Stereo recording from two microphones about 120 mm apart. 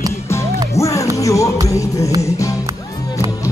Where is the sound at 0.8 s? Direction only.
25° left (ahead or behind).